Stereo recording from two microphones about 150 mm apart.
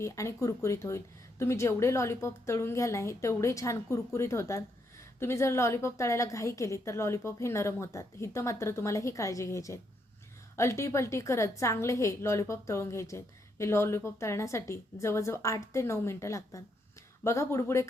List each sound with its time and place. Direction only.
0.0 s a woman's voice: 20° left (ahead or behind)